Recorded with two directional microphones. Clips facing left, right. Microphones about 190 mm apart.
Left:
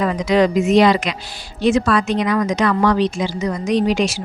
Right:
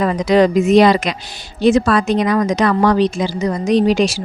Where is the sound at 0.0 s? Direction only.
40° right (ahead or behind).